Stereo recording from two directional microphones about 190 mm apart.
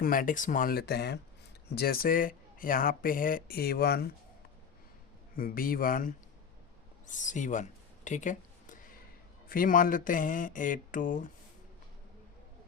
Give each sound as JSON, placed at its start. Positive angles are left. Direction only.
{"t": 0.0, "sound": "speech", "side_deg": 45}
{"t": 5.4, "sound": "speech", "side_deg": 50}
{"t": 7.0, "sound": "a sound", "side_deg": 40}
{"t": 9.5, "sound": "speech", "side_deg": 45}